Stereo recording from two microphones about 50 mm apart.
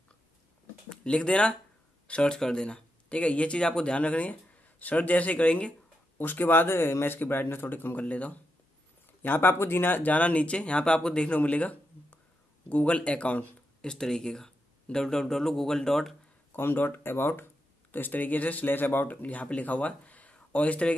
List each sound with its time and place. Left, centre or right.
0.8 s speech: left
6.1 s speech: left
8.0 s speech: left
9.2 s speech: left
13.7 s speech: centre
16.5 s speech: left
17.9 s speech: left
19.0 s speech: left